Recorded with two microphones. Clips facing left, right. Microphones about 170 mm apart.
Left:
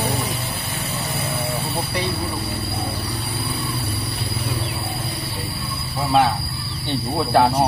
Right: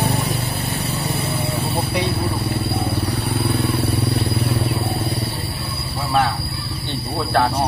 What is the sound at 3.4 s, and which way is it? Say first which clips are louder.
Vehicle: right 8 dB; 65° right (ahead or behind).